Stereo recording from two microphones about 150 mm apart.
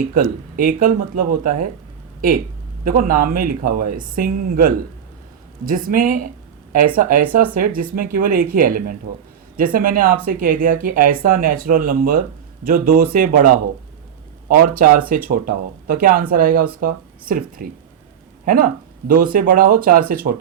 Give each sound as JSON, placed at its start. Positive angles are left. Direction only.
{"t": 0.1, "sound": "speech", "side_deg": -70}
{"t": 2.8, "sound": "speech", "side_deg": -70}
{"t": 14.8, "sound": "speech", "side_deg": -70}